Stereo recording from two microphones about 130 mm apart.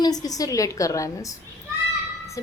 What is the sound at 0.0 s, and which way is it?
Speech, 30° left (ahead or behind).